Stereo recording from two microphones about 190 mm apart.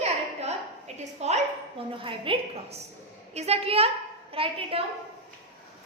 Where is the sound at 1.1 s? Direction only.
35° right (ahead or behind).